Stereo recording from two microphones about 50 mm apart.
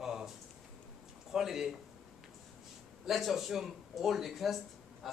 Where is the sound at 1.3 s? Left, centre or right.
Centre.